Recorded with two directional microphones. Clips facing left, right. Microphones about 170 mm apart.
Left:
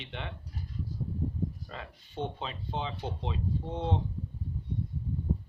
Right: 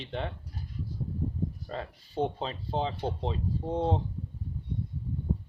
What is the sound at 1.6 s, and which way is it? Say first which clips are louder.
Speech: right 6 dB; 35° right (ahead or behind).